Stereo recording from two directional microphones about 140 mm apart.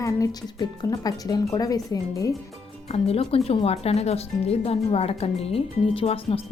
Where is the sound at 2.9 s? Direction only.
45° left (ahead or behind).